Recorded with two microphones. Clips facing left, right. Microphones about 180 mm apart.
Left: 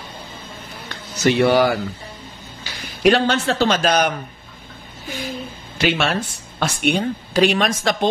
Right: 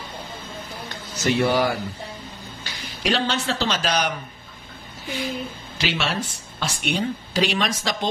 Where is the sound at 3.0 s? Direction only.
55° left (ahead or behind).